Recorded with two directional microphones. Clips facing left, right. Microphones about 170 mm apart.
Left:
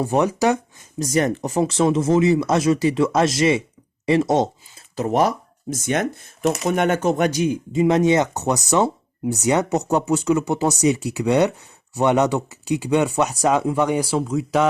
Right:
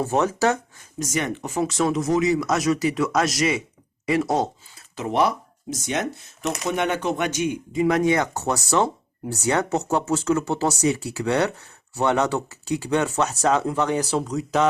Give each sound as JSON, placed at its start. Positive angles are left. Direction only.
{"t": 0.0, "sound": "speech", "side_deg": 15}
{"t": 0.9, "sound": "speech", "side_deg": 35}
{"t": 4.9, "sound": "speech", "side_deg": 45}